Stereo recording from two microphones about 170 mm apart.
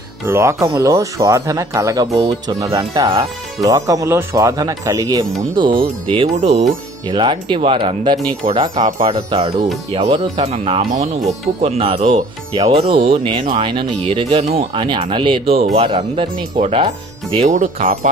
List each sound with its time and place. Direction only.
0.3 s speech: 15° right (ahead or behind); by 6.6 s 40° right (ahead or behind)
7.1 s speech: 30° right (ahead or behind)
17.5 s speech: 45° right (ahead or behind)